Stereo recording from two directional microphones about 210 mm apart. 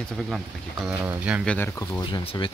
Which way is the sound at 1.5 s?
10° left (ahead or behind).